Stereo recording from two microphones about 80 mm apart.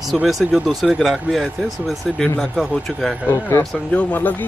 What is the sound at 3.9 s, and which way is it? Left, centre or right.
Speech, centre.